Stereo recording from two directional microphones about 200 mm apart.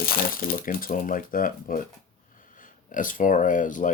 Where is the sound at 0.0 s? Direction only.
45° left (ahead or behind).